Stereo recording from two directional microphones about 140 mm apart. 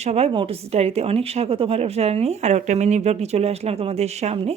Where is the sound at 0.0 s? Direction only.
50° right (ahead or behind).